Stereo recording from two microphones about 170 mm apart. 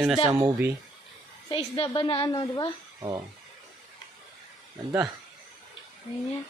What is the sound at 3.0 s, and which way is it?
Speech, 20° right (ahead or behind).